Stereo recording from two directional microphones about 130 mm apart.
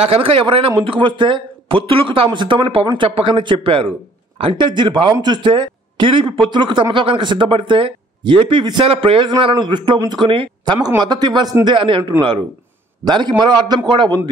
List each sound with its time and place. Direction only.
0.0 s a man's voice: 45° right (ahead or behind)
13.0 s speech: 35° right (ahead or behind)